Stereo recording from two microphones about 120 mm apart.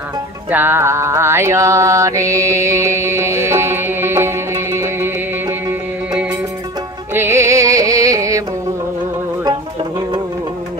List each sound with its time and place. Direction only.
0.5 s mantra: 15° right (ahead or behind)
7.2 s music: 20° right (ahead or behind)